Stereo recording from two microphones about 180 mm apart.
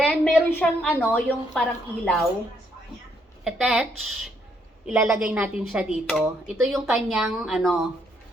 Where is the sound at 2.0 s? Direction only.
Centre (ahead or behind).